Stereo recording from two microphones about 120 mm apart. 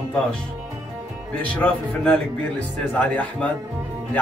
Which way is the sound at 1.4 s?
10° left (ahead or behind).